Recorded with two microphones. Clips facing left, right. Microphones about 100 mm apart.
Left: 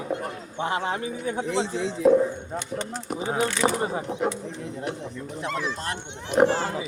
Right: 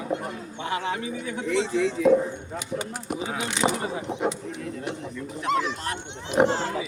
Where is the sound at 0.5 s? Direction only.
30° left (ahead or behind).